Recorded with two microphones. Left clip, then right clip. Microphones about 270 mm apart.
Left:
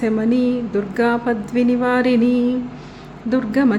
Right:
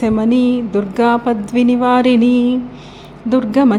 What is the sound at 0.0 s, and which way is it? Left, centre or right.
Speech, right.